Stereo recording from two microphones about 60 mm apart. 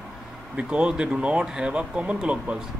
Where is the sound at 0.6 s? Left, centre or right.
Centre.